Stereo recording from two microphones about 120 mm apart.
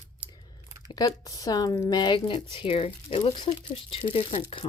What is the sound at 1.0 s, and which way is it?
Speech, 30° left (ahead or behind).